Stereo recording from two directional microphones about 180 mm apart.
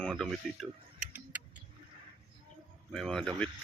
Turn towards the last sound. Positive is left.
turn(degrees=5)  # may be behind; listen again after turning